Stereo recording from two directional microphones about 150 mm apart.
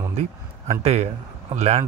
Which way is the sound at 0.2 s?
45° right (ahead or behind).